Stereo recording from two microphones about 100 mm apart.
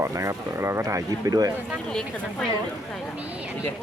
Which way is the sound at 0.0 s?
30° right (ahead or behind).